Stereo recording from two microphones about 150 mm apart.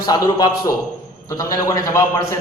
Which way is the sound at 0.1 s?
25° left (ahead or behind).